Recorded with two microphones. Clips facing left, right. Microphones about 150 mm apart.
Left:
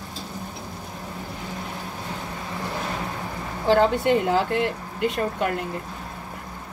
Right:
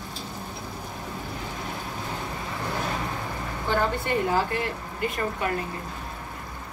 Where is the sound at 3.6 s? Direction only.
85° left.